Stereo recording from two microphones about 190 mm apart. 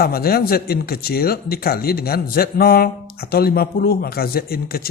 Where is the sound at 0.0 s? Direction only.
55° left (ahead or behind).